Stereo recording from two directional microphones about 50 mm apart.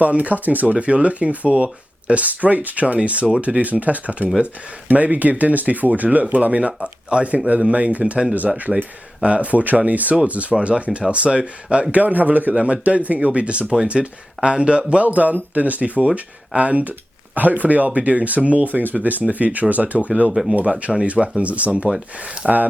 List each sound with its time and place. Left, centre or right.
0.0 s speech: right
8.7 s speech: centre
9.2 s speech: right
20.3 s speech: centre
20.6 s speech: right
22.4 s speech: centre